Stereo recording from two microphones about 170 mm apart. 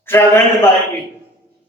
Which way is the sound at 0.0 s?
15° left (ahead or behind).